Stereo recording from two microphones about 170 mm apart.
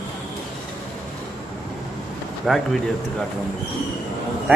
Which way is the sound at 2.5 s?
Centre (ahead or behind).